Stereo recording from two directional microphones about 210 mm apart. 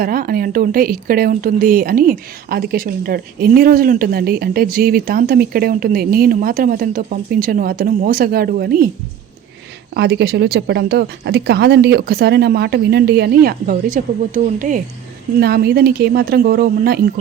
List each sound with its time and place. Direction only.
0.0 s speech: 45° right (ahead or behind)
9.9 s speech: 55° right (ahead or behind); by 14.8 s 40° right (ahead or behind)
15.4 s speech: 50° right (ahead or behind)